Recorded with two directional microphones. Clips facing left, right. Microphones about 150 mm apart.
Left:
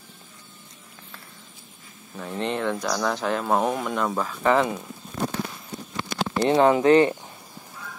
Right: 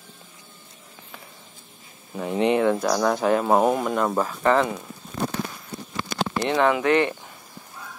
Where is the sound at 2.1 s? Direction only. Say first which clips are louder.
Right 7 dB; 15° right (ahead or behind).